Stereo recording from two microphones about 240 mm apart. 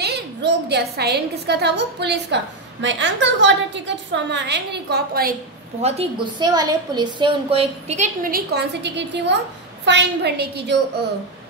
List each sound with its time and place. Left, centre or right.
0.0 s a woman's voice: right
5.8 s a woman's voice: right